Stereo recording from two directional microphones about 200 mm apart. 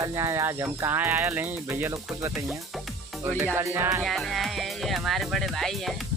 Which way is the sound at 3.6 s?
10° right (ahead or behind).